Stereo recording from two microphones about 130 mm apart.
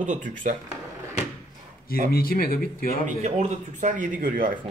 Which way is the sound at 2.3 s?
90° left.